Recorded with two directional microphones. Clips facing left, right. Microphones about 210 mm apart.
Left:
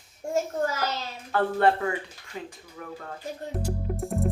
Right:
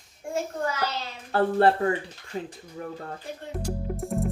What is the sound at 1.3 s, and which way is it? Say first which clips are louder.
Speech: right 2 dB; 35° right (ahead or behind).